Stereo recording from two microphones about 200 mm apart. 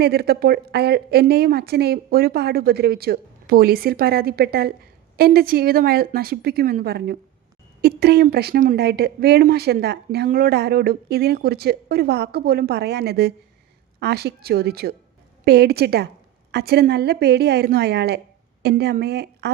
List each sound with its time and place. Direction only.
0.0 s a woman's voice: 50° right (ahead or behind)